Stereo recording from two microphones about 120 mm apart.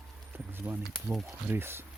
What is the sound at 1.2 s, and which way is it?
Speech, 20° right (ahead or behind).